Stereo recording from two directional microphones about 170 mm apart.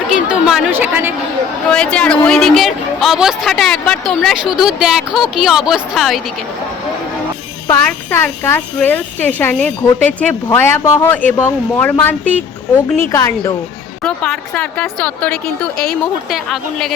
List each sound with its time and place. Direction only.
0.1 s chatter: 5° right (ahead or behind)
1.7 s a woman's voice: 5° left (ahead or behind)
7.7 s speech: 15° left (ahead or behind)
14.0 s a woman's voice: 5° left (ahead or behind)